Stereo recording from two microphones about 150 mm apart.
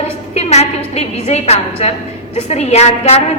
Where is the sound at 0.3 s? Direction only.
45° left (ahead or behind).